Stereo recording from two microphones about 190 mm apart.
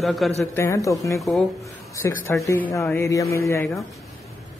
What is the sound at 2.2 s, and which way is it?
Speech, 15° left (ahead or behind).